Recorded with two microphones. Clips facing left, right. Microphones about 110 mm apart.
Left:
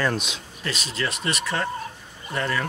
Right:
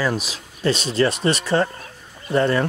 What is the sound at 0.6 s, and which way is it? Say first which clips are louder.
Speech: right 10 dB; 30° right (ahead or behind).